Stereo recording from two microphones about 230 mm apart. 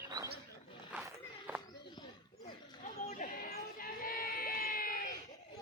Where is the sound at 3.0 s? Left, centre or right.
Left.